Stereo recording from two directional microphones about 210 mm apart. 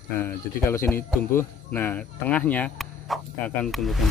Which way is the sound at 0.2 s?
10° left (ahead or behind).